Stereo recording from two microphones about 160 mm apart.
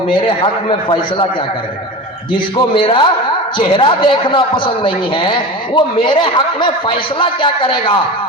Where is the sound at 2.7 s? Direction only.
30° left (ahead or behind).